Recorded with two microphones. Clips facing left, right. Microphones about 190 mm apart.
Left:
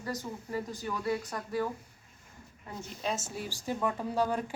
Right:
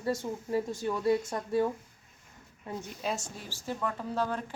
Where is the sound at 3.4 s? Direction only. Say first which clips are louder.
Left 2 dB; 15° left (ahead or behind).